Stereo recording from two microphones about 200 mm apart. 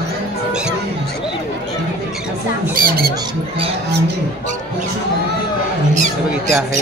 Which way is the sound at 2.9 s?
50° right (ahead or behind).